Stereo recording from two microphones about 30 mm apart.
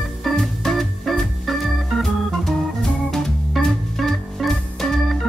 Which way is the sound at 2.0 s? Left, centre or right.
Centre.